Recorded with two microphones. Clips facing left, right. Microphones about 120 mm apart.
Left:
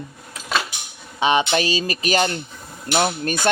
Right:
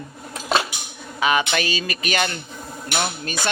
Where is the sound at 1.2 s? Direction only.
30° left (ahead or behind).